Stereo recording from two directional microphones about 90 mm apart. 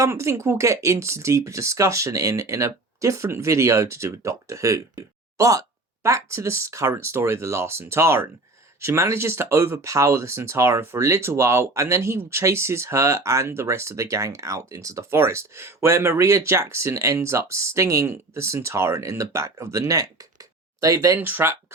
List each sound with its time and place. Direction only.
0.0 s speech: 30° right (ahead or behind)
21.2 s speech: 25° right (ahead or behind)